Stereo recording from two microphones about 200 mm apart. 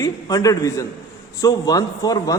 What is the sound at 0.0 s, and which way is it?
A man's voice, 15° left (ahead or behind).